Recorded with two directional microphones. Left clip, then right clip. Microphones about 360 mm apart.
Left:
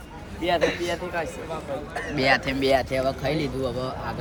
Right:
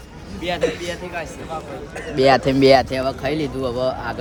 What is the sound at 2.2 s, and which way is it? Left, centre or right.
Speech, centre.